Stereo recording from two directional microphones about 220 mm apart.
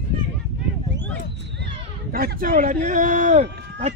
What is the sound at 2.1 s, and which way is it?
Speech, 40° right (ahead or behind).